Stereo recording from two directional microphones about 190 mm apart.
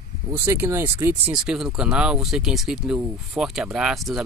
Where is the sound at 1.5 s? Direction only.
5° right (ahead or behind).